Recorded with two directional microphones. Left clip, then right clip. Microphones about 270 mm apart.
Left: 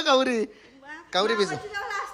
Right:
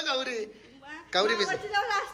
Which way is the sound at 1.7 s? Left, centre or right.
Centre.